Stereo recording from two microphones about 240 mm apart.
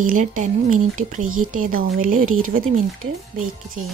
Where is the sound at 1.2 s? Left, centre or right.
Right.